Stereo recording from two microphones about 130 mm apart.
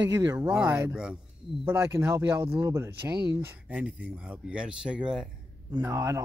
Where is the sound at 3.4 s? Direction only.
10° right (ahead or behind).